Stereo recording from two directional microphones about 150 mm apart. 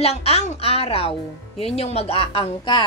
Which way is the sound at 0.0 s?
45° left (ahead or behind).